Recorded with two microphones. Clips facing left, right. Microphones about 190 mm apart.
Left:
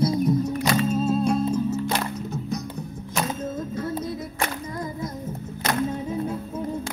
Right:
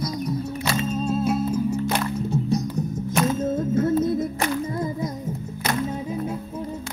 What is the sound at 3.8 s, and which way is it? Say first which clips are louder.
Music: right 11 dB; 50° right (ahead or behind).